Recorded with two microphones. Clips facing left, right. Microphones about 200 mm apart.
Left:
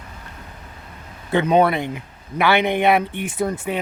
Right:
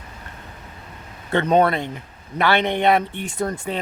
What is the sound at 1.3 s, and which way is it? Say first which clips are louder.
Speech: left 1 dB; 5° left (ahead or behind).